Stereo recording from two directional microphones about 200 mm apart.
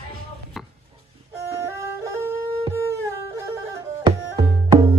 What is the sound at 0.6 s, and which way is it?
Chopping, centre (ahead or behind).